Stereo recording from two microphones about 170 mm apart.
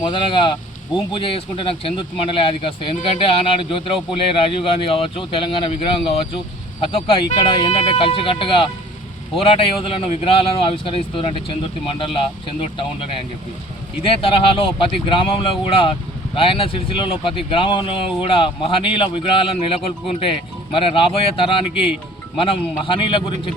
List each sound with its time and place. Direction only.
0.0 s speech: 30° left (ahead or behind)